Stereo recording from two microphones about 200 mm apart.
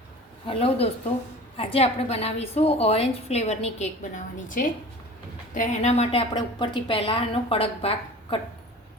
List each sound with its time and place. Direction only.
0.4 s a woman's voice: 30° left (ahead or behind)